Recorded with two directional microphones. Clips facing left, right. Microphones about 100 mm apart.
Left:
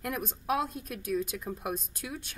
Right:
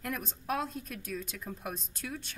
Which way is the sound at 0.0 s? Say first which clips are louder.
Left 3 dB; 10° left (ahead or behind).